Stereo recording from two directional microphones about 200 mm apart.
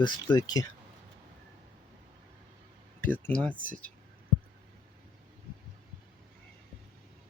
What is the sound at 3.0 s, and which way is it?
Speech, 10° left (ahead or behind).